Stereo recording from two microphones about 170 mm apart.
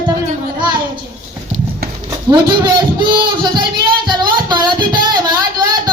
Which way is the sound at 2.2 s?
25° right (ahead or behind).